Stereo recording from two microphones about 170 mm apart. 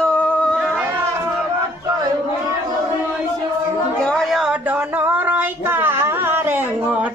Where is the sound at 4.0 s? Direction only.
5° left (ahead or behind).